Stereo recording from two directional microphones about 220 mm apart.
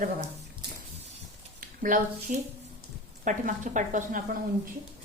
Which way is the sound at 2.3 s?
35° right (ahead or behind).